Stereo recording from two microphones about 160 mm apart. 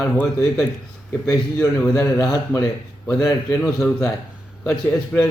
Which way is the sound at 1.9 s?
15° left (ahead or behind).